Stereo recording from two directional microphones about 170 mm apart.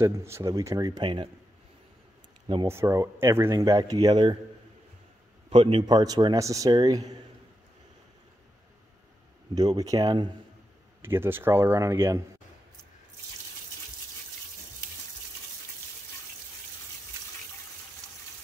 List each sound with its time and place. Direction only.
0.0 s speech: 15° right (ahead or behind)
2.4 s speech: 20° right (ahead or behind)
5.5 s speech: 30° right (ahead or behind)
9.6 s speech: 20° right (ahead or behind)
11.0 s a man's voice: 15° right (ahead or behind)